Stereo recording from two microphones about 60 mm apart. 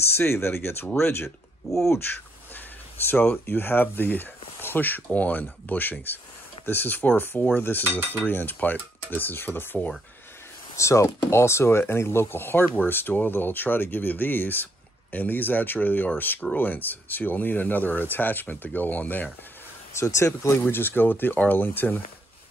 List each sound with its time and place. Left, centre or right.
0.0 s speech: left
1.7 s speech: centre
3.1 s speech: left
10.8 s speech: left
20.0 s speech: left